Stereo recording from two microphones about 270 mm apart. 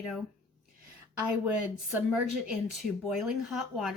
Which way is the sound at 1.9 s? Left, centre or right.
Centre.